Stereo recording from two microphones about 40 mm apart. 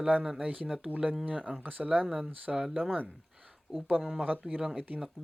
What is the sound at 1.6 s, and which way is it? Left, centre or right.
Speech, right.